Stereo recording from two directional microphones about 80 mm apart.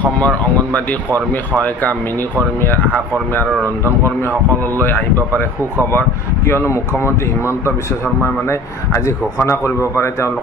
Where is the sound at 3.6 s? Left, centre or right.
Right.